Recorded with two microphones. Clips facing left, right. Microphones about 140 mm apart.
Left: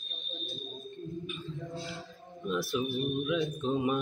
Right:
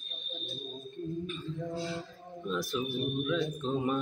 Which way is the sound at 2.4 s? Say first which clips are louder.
Left 2 dB; 5° left (ahead or behind).